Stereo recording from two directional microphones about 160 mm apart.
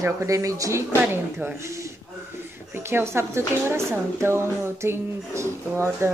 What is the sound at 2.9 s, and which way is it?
Speech, 15° right (ahead or behind).